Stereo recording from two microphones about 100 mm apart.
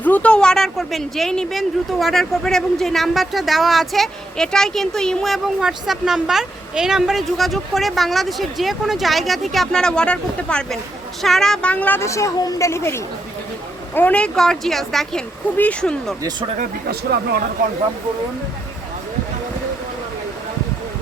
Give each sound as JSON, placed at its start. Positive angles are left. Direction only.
{"t": 0.0, "sound": "speech", "side_deg": 15}
{"t": 12.0, "sound": "speech", "side_deg": 30}
{"t": 13.9, "sound": "speech", "side_deg": 15}
{"t": 15.5, "sound": "speech", "side_deg": 15}